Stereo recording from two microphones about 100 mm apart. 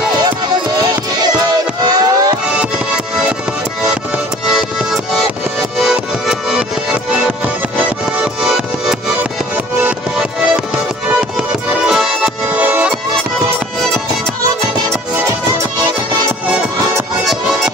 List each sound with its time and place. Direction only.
1.2 s music: 40° right (ahead or behind)
4.5 s music: 5° right (ahead or behind)
12.5 s music: 15° right (ahead or behind)